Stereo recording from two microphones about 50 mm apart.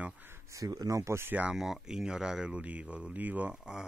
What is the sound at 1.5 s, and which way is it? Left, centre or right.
Speech, centre.